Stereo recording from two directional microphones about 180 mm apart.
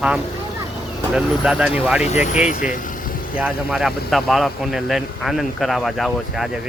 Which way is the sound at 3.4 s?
5° right (ahead or behind).